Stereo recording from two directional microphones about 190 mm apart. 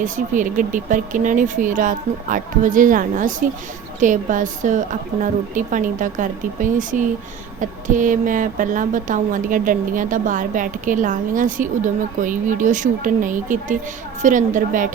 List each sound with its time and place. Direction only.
0.0 s a woman's voice: 45° right (ahead or behind)